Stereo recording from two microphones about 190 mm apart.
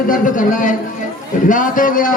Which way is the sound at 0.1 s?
45° left (ahead or behind).